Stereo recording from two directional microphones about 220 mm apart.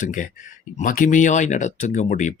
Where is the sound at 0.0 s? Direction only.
35° left (ahead or behind).